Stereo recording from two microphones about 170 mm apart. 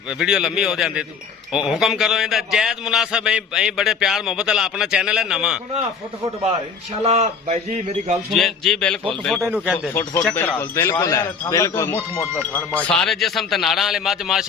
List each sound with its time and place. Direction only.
0.1 s a man's voice: 5° right (ahead or behind)
7.0 s a man's voice: 40° right (ahead or behind)
8.3 s a man's voice: centre (ahead or behind)